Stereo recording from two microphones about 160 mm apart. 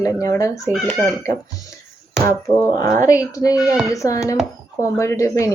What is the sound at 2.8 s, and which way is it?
Speech, 20° left (ahead or behind).